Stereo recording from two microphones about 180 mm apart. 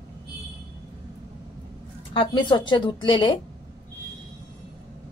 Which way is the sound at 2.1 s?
25° left (ahead or behind).